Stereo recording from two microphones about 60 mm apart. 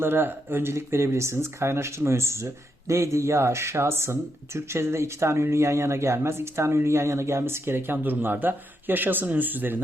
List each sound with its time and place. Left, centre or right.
0.0 s speech: right